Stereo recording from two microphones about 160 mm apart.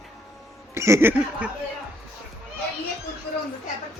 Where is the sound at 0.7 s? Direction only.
20° right (ahead or behind).